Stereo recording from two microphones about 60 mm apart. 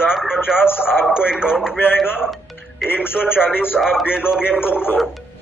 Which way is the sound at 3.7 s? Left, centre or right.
Centre.